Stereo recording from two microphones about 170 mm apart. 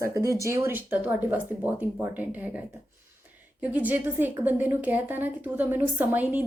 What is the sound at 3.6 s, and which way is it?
Speech, 10° right (ahead or behind).